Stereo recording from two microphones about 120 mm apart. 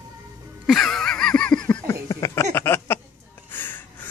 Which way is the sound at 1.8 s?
25° left (ahead or behind).